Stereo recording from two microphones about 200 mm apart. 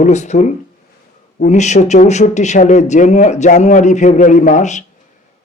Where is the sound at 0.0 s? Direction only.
35° left (ahead or behind).